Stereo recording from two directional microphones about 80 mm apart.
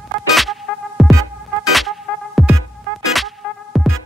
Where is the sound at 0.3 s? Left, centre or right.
Centre.